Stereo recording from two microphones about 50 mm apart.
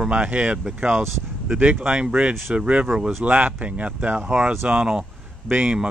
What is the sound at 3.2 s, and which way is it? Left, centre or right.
Speech, right.